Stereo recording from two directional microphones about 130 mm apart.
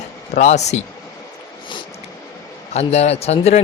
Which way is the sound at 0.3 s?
60° left (ahead or behind).